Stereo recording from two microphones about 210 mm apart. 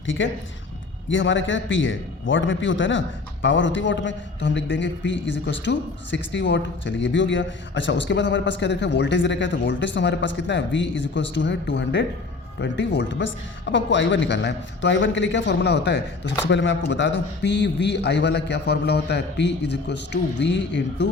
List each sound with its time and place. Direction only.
0.0 s a man's voice: 65° left (ahead or behind)